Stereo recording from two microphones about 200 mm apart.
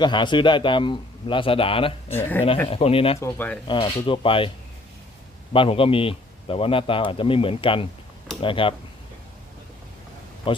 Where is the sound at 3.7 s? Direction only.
25° left (ahead or behind).